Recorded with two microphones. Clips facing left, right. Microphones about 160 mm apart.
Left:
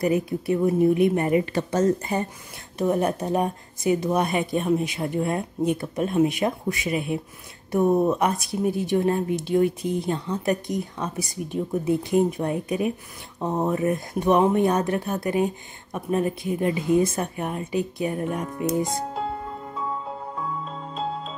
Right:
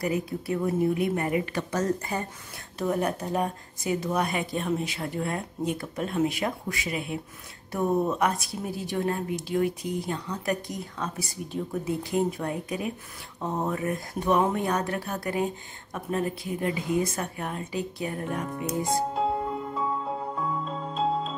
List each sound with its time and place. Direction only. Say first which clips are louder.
0.0 s a woman's voice: left 6 dB; 20° left (ahead or behind)
18.9 s music: right 2 dB; centre (ahead or behind)
20.9 s music: right 3 dB; centre (ahead or behind)